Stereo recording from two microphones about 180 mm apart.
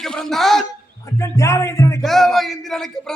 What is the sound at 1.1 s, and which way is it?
Speech, 15° left (ahead or behind).